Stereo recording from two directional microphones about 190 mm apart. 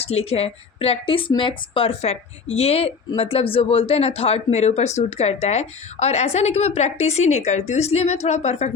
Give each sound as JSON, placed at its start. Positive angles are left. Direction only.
{"t": 0.0, "sound": "speech", "side_deg": 30}